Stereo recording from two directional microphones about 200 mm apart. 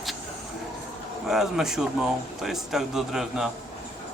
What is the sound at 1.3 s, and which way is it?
Speech, centre (ahead or behind).